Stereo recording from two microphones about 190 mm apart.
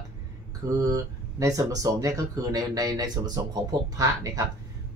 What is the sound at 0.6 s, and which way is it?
Speech, 15° right (ahead or behind).